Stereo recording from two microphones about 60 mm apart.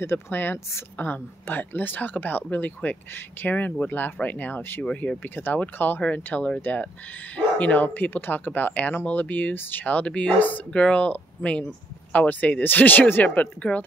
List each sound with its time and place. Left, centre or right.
0.0 s speech: left
9.8 s speech: left